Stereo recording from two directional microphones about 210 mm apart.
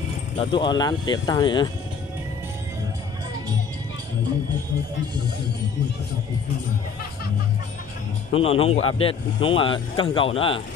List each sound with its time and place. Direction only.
0.4 s speech: 20° left (ahead or behind)
8.3 s speech: 30° left (ahead or behind)